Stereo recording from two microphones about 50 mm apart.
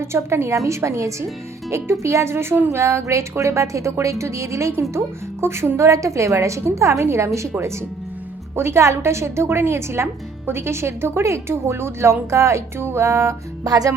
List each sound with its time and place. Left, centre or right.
0.0 s a woman's voice: right
1.7 s a woman's voice: right
2.6 s speech: right
4.8 s a woman's voice: right
5.7 s a woman's voice: right
8.5 s a woman's voice: right
12.8 s a woman's voice: right